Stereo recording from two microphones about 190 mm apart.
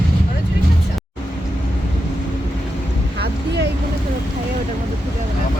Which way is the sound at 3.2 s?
60° right (ahead or behind).